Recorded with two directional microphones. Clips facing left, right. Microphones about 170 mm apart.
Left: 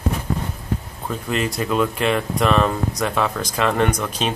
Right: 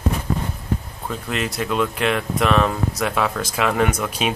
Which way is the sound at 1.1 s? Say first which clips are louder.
Left 2 dB; centre (ahead or behind).